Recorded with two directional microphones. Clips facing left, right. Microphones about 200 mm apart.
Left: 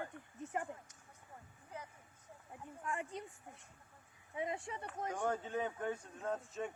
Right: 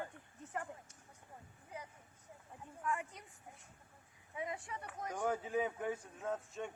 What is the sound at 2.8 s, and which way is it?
Speech, 25° left (ahead or behind).